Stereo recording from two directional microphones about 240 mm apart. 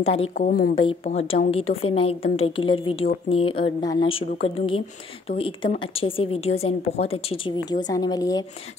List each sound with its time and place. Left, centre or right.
0.0 s speech: left
0.3 s a woman's voice: left
0.7 s speech: left